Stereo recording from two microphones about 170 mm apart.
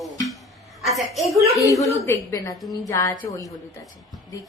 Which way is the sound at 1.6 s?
20° left (ahead or behind).